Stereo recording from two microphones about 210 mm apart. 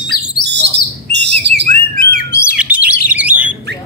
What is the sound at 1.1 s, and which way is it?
Bird, 55° right (ahead or behind).